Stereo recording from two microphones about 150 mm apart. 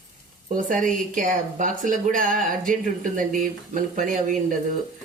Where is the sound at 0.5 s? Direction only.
65° right (ahead or behind).